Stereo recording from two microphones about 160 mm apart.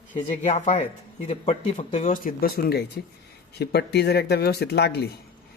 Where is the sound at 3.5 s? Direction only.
90° left.